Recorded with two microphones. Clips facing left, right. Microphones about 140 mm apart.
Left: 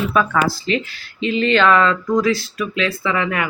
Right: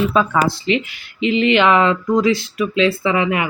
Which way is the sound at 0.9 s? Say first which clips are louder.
Right 3 dB; 20° right (ahead or behind).